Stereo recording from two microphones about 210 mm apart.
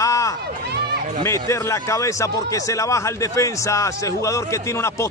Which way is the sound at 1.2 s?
15° left (ahead or behind).